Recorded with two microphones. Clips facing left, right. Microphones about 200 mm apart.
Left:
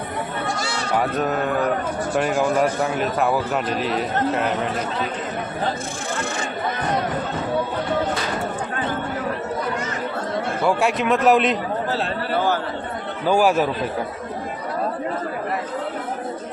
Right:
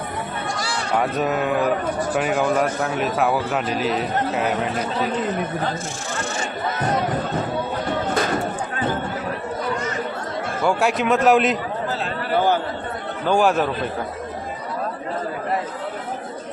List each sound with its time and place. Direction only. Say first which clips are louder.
0.9 s a man's voice: right 1 dB; 5° right (ahead or behind)
10.6 s a man's voice: right 1 dB; centre (ahead or behind)
13.2 s speech: left 1 dB; 5° left (ahead or behind)